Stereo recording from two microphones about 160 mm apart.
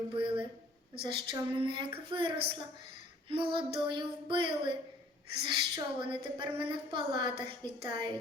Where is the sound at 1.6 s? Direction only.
30° right (ahead or behind).